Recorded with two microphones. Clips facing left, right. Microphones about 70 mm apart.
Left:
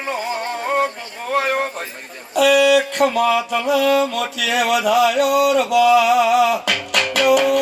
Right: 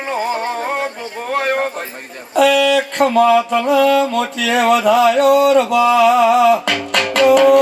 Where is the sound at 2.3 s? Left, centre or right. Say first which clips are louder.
Right 1 dB; right.